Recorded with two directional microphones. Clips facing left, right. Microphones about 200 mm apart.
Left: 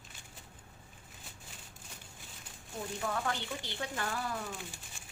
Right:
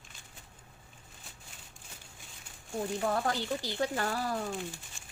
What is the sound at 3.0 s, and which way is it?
Speech, 35° right (ahead or behind).